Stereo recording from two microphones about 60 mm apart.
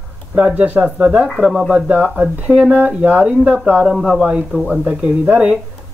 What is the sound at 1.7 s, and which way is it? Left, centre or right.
Speech, right.